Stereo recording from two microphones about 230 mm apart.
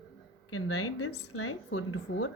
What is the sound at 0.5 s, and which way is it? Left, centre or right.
Speech, left.